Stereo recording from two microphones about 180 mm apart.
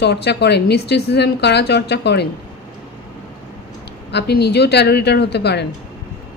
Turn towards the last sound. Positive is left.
turn(degrees=65)  # may be behind; listen again after turning